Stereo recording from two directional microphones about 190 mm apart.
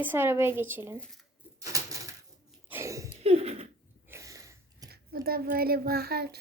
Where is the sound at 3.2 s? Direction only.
30° right (ahead or behind).